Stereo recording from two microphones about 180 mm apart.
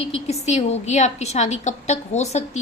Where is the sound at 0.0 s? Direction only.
35° left (ahead or behind).